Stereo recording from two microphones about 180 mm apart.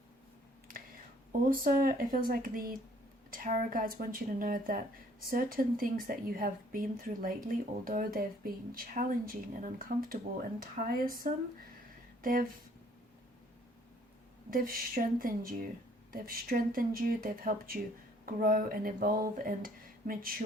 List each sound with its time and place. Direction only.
1.5 s speech: 50° right (ahead or behind)
14.5 s speech: 55° right (ahead or behind)